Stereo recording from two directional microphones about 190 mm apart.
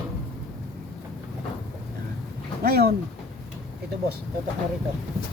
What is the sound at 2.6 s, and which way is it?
Speech, 55° right (ahead or behind).